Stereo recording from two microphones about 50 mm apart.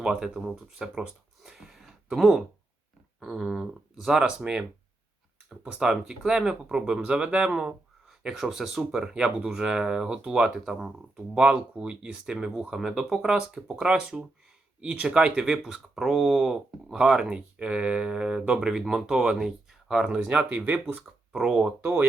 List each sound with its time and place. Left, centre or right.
0.0 s speech: centre
1.5 s a sound: centre
3.2 s speech: centre
4.4 s speech: centre
5.8 s speech: centre
7.5 s speech: centre
20.1 s speech: right
21.3 s speech: centre